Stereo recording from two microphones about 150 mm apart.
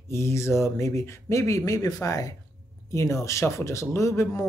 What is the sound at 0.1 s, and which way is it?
Speech, 20° left (ahead or behind).